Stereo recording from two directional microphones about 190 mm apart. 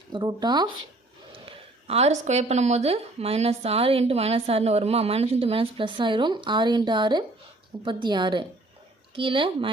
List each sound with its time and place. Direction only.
0.1 s speech: 20° right (ahead or behind)
1.5 s speech: 35° right (ahead or behind)